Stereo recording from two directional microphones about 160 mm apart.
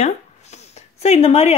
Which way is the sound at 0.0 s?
45° left (ahead or behind).